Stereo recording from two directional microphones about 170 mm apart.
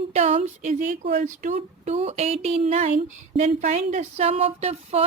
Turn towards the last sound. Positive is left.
turn(degrees=-40)  # may be behind; listen again after turning